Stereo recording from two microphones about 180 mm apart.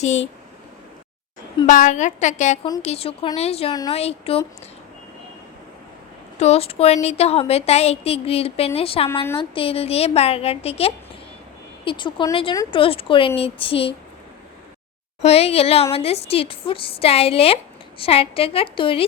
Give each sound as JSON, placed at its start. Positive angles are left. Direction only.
{"t": 1.6, "sound": "a woman's voice", "side_deg": 45}
{"t": 6.4, "sound": "a woman's voice", "side_deg": 35}
{"t": 15.2, "sound": "a woman's voice", "side_deg": 35}